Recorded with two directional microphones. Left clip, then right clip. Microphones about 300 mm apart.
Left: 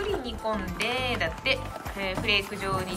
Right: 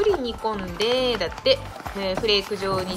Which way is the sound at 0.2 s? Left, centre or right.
Centre.